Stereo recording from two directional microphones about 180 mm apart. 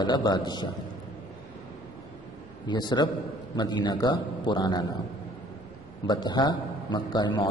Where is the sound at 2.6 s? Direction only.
25° left (ahead or behind).